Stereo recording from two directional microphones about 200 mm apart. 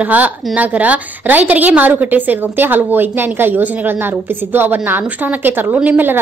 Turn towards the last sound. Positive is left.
turn(degrees=-10)  # may be behind; listen again after turning